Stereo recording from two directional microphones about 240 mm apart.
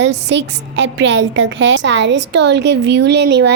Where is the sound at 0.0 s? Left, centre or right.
Right.